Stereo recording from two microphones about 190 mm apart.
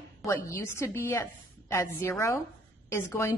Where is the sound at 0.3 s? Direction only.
15° left (ahead or behind).